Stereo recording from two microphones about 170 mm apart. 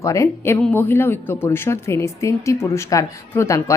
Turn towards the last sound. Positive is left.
turn(degrees=15)  # may be behind; listen again after turning